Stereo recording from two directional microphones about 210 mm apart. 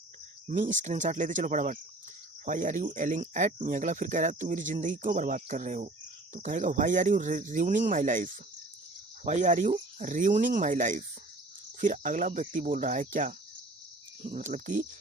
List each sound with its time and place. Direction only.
0.4 s speech: 40° right (ahead or behind)
14.3 s speech: 35° right (ahead or behind)